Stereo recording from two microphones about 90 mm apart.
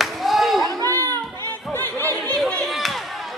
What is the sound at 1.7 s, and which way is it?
Chatter, 20° left (ahead or behind).